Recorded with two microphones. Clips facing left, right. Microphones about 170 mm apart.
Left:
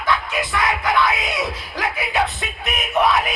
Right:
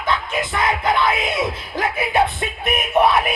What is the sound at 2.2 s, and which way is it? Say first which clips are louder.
Music: right 4 dB; 50° right (ahead or behind).